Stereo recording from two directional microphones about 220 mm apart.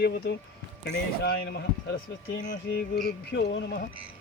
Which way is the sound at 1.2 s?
50° left (ahead or behind).